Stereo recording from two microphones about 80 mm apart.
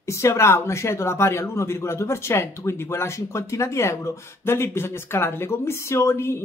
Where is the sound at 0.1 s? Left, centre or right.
Left.